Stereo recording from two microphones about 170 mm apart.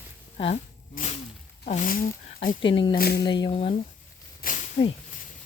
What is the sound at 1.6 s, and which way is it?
Speech, 45° left (ahead or behind).